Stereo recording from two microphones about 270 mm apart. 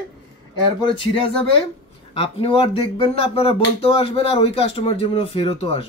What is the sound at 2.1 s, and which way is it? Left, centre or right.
Speech, centre.